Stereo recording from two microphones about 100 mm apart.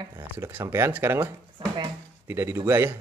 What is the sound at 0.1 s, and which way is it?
Speech, 20° right (ahead or behind).